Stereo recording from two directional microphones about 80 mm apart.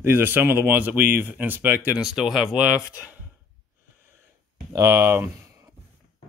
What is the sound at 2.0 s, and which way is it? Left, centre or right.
Speech, centre.